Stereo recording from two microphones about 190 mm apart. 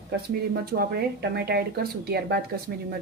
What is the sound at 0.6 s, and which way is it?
Speech, 55° right (ahead or behind).